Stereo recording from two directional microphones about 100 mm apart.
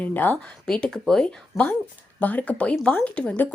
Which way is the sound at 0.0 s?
20° left (ahead or behind).